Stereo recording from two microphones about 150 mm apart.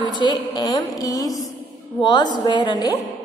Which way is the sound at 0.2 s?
25° left (ahead or behind).